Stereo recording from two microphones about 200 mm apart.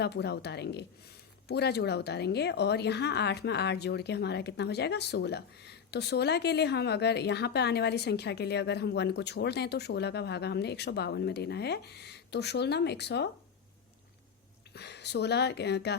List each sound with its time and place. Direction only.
0.0 s speech: 55° left (ahead or behind)
14.7 s speech: 55° left (ahead or behind)